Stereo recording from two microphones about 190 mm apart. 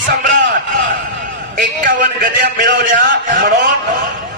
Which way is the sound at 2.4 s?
65° right (ahead or behind).